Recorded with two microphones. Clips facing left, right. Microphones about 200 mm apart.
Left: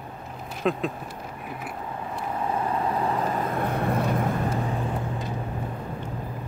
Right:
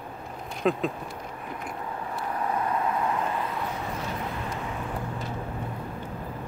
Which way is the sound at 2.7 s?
35° left (ahead or behind).